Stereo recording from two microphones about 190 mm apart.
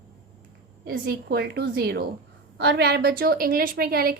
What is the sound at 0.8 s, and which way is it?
A woman's voice, 55° right (ahead or behind).